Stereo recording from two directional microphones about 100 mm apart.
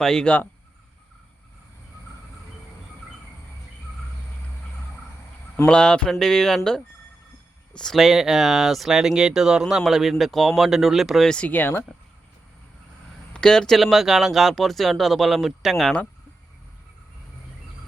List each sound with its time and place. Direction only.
0.0 s speech: 5° left (ahead or behind)
5.6 s speech: 10° left (ahead or behind)
7.7 s speech: 5° left (ahead or behind)
11.3 s speech: 15° left (ahead or behind)
13.3 s speech: 5° left (ahead or behind)